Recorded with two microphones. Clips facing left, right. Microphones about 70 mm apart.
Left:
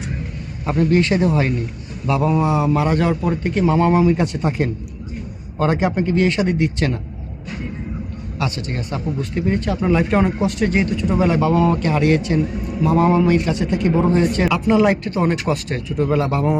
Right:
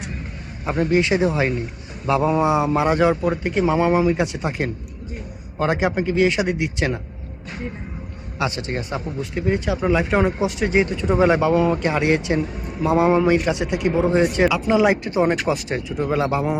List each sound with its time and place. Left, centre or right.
0.6 s speech: centre
2.0 s speech: right; by 7.0 s centre
8.4 s speech: right
9.3 s speech: centre; by 11.3 s right
11.3 s speech: centre
15.0 s speech: centre